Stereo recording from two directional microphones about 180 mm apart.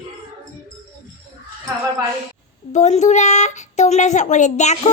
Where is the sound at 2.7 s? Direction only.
40° left (ahead or behind).